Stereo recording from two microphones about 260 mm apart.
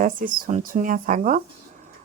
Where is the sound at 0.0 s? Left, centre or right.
Right.